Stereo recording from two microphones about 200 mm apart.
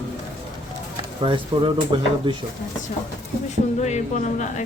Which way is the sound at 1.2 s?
25° right (ahead or behind).